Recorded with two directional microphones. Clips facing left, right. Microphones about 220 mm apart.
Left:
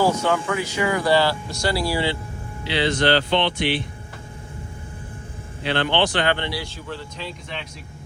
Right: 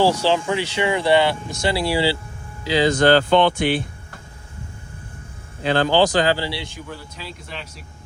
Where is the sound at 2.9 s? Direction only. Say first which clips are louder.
Right 4 dB; 45° right (ahead or behind).